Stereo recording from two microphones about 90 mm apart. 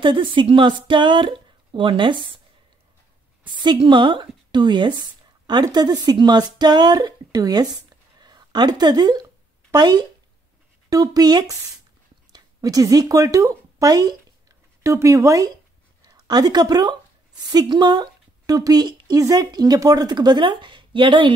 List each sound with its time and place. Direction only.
0.0 s speech: 70° right (ahead or behind)
3.4 s a woman's voice: 55° right (ahead or behind)